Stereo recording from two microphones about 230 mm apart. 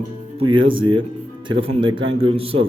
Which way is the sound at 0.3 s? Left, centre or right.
Right.